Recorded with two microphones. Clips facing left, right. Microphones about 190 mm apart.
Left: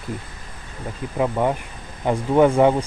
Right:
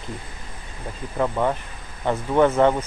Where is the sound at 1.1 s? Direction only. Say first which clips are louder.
Left 1 dB; 15° left (ahead or behind).